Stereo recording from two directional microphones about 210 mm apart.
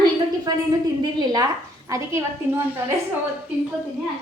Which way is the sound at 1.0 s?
20° right (ahead or behind).